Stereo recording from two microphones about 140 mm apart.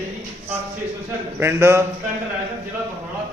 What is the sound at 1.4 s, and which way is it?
Speech, 15° right (ahead or behind).